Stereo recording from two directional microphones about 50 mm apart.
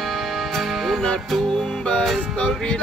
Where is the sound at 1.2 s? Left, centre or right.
Centre.